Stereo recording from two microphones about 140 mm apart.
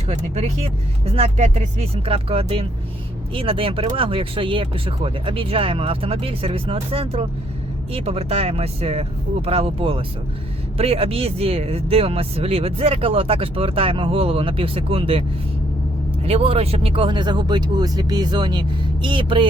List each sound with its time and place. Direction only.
0.1 s speech: 50° right (ahead or behind)
16.2 s speech: 45° right (ahead or behind)